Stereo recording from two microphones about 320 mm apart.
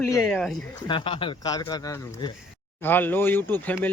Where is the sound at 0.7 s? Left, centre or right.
Centre.